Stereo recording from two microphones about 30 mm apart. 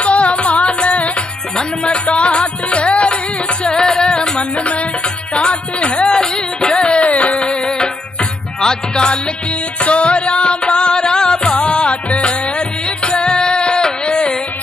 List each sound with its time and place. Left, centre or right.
0.0 s music: left
1.6 s music: left
3.7 s music: left
6.1 s music: left
6.8 s music: left
7.1 s music: left
7.3 s music: left
9.8 s music: left